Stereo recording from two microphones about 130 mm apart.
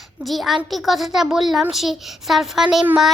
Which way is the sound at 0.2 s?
Centre (ahead or behind).